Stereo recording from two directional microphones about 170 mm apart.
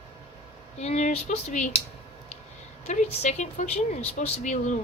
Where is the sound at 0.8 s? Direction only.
40° left (ahead or behind).